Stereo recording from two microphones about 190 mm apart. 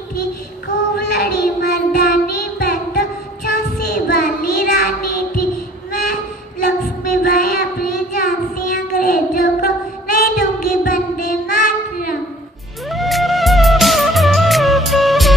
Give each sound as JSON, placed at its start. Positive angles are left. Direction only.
{"t": 0.9, "sound": "child singing", "side_deg": 55}
{"t": 7.1, "sound": "child singing", "side_deg": 50}
{"t": 12.9, "sound": "music", "side_deg": 0}